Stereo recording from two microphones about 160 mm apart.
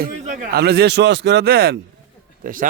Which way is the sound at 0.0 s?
75° right (ahead or behind).